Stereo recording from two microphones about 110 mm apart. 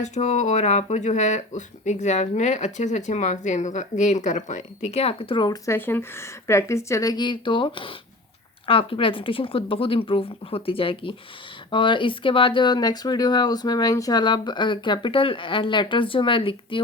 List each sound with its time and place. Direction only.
0.0 s speech: 90° left; by 5.5 s 45° left (ahead or behind)
5.6 s speech: 20° left (ahead or behind); by 16.8 s 50° left (ahead or behind)